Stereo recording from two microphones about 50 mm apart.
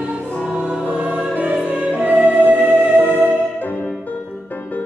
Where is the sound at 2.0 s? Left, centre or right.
Right.